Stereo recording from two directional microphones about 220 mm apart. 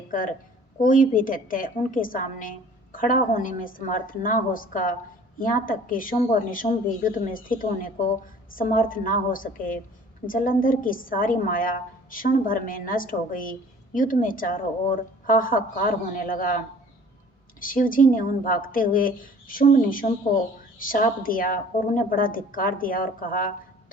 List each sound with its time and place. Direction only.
0.8 s a woman's voice: 35° left (ahead or behind)
17.6 s a woman's voice: 40° left (ahead or behind)